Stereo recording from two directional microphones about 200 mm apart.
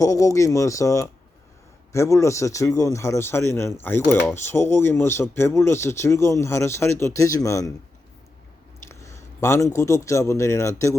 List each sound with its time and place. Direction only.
0.0 s speech: 15° left (ahead or behind)
8.8 s a man's voice: 15° left (ahead or behind)